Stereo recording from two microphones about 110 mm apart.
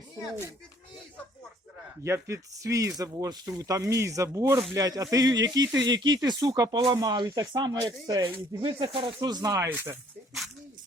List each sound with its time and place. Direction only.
2.0 s speech: 25° right (ahead or behind)
8.6 s speech: 55° right (ahead or behind)
9.2 s speech: 35° right (ahead or behind)
9.6 s speech: 20° right (ahead or behind)